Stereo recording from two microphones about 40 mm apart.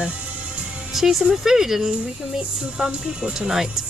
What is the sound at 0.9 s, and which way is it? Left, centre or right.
Speech, centre.